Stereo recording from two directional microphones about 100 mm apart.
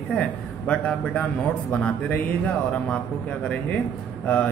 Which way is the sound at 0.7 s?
10° left (ahead or behind).